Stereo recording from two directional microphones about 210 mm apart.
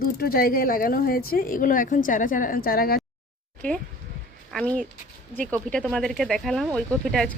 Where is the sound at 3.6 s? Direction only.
5° left (ahead or behind).